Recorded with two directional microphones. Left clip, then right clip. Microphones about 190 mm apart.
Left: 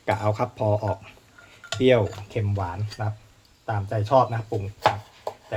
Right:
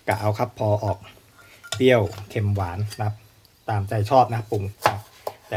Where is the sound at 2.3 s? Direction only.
35° right (ahead or behind).